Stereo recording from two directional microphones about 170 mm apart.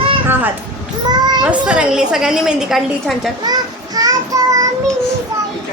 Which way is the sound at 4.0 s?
20° right (ahead or behind).